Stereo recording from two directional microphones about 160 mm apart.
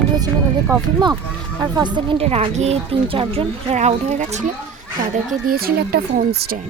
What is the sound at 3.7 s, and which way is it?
Speech, 45° right (ahead or behind).